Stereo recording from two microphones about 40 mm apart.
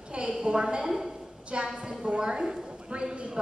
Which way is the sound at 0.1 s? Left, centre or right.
Right.